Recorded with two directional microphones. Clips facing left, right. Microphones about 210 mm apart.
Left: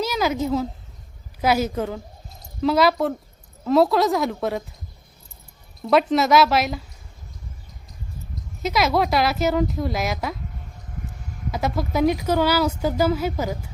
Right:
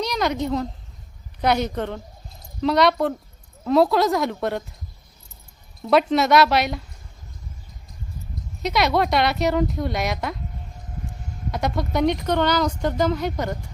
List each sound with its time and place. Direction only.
0.0 s speech: 5° left (ahead or behind)
5.8 s speech: centre (ahead or behind)
8.6 s speech: centre (ahead or behind)
11.5 s speech: centre (ahead or behind)